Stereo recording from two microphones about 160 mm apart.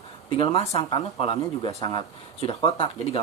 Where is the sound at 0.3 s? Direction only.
40° left (ahead or behind).